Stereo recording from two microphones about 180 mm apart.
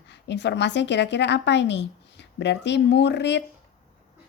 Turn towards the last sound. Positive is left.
turn(degrees=70)  # may be behind; listen again after turning